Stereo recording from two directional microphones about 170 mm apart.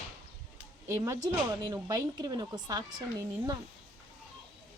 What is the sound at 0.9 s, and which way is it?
Speech, 15° right (ahead or behind).